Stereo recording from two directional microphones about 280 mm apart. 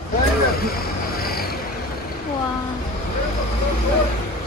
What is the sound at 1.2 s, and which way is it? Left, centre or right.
Vehicle, left.